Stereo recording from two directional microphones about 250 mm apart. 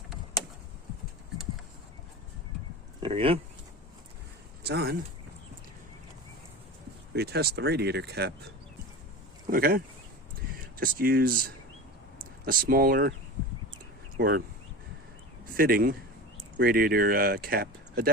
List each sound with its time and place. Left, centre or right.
3.0 s speech: right
4.6 s speech: right
7.1 s speech: right
9.5 s speech: right
14.2 s speech: right
15.5 s speech: right